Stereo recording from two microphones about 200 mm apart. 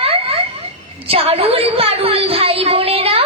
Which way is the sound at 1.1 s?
30° right (ahead or behind).